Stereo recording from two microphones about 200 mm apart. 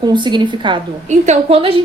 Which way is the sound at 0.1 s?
20° right (ahead or behind).